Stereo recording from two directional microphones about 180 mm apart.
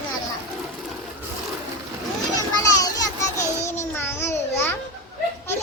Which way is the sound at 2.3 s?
20° left (ahead or behind).